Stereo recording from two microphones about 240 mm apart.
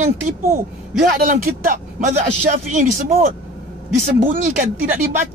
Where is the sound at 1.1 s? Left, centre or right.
Right.